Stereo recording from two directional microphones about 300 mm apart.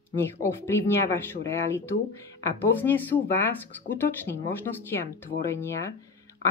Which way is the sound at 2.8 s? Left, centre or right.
Centre.